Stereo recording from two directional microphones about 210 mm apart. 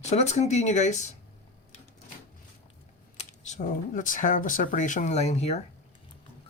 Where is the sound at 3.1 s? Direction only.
35° left (ahead or behind).